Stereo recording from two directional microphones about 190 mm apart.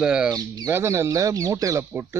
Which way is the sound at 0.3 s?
20° right (ahead or behind).